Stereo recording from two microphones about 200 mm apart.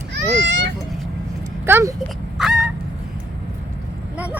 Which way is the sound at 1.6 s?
15° right (ahead or behind).